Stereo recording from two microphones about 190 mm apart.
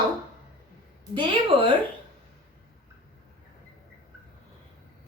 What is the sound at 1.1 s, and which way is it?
Speech, 25° right (ahead or behind).